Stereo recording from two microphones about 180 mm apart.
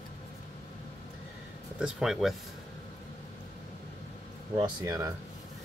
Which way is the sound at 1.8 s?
5° right (ahead or behind).